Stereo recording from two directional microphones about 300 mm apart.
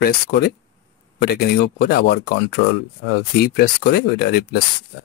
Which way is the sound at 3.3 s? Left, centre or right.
Left.